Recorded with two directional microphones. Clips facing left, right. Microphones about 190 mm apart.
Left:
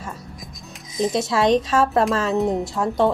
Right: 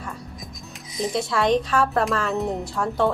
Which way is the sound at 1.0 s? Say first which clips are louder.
Left 3 dB; 20° left (ahead or behind).